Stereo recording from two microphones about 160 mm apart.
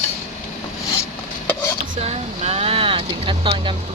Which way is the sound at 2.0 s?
40° right (ahead or behind).